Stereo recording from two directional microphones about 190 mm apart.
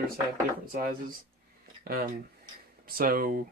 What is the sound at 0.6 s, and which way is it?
Speech, 50° right (ahead or behind).